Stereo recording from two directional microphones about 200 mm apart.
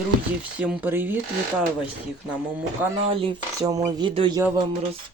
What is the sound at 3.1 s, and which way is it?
Speech, 20° right (ahead or behind).